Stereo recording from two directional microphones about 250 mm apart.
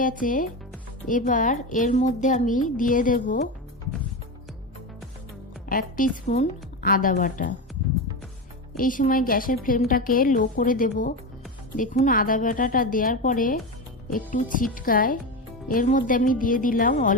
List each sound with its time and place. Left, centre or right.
0.0 s a woman's voice: left
5.6 s a woman's voice: left
8.7 s a woman's voice: left